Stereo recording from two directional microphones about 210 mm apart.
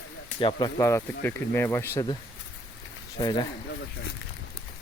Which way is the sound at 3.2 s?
20° left (ahead or behind).